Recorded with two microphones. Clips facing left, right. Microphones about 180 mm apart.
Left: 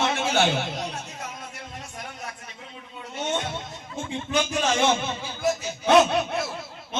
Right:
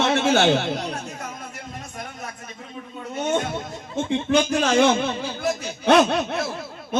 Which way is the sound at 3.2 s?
45° right (ahead or behind).